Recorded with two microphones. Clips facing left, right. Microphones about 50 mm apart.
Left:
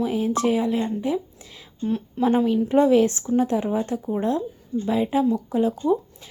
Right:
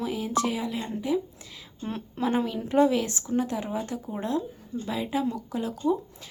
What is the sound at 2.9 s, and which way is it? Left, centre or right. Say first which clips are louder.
A woman's voice: left 8 dB; left.